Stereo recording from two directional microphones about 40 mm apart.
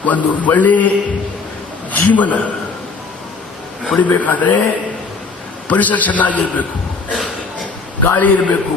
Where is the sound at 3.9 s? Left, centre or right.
Left.